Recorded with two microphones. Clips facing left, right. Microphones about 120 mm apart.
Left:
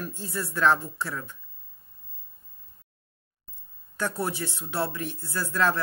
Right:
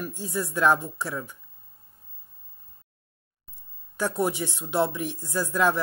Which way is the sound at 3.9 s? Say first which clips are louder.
Right 4 dB; 15° right (ahead or behind).